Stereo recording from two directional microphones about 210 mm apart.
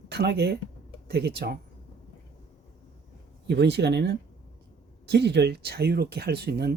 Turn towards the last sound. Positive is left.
turn(degrees=-50)  # may be behind; listen again after turning